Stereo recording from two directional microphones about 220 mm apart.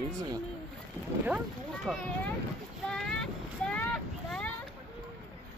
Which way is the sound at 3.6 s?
5° left (ahead or behind).